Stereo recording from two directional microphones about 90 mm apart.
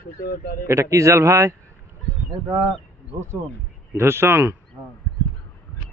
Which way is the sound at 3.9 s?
25° right (ahead or behind).